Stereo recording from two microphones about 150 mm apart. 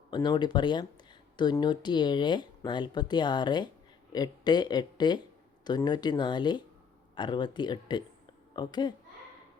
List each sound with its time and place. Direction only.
0.1 s speech: 30° left (ahead or behind)